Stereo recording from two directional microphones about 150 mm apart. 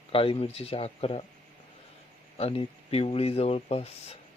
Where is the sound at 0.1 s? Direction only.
35° left (ahead or behind).